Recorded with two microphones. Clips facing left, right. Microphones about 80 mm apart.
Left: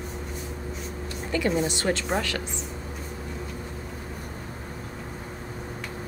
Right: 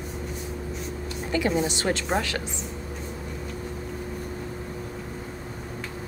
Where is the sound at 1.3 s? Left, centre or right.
Centre.